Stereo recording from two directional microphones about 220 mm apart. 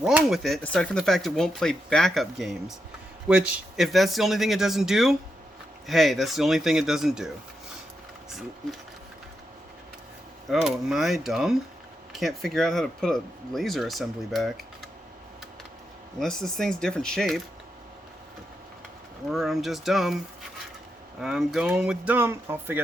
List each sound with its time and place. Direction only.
0.0 s speech: 5° right (ahead or behind)
10.5 s speech: centre (ahead or behind)
16.2 s speech: centre (ahead or behind)
19.3 s speech: centre (ahead or behind)
21.2 s speech: centre (ahead or behind)